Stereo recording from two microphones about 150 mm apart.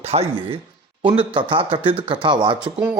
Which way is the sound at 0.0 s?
45° right (ahead or behind).